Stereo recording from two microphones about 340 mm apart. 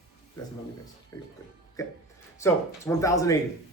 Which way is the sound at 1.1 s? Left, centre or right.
Centre.